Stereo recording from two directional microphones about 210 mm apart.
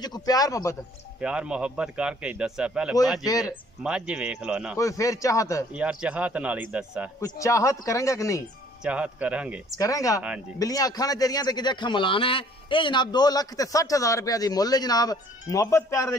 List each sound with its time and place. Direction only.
0.0 s speech: 20° left (ahead or behind)
1.2 s a man's voice: 5° right (ahead or behind)
3.3 s speech: 15° left (ahead or behind)
3.8 s a man's voice: 5° right (ahead or behind)
4.7 s speech: 15° left (ahead or behind)
5.7 s speech: 5° right (ahead or behind)
7.2 s speech: 15° left (ahead or behind)
8.8 s a man's voice: 5° right (ahead or behind)
9.8 s speech: 15° left (ahead or behind)